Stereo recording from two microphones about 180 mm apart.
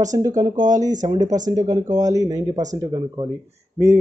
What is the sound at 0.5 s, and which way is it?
Speech, 45° right (ahead or behind).